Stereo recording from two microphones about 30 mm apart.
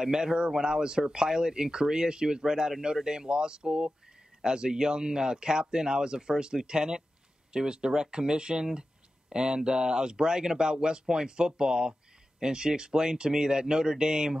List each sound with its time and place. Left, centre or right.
0.0 s speech: right